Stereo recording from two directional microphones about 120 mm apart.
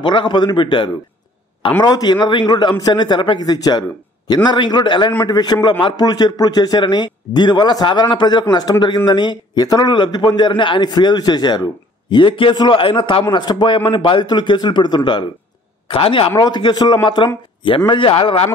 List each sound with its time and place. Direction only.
0.0 s a man's voice: 40° left (ahead or behind)